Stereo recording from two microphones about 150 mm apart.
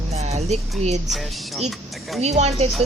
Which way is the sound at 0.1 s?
45° right (ahead or behind).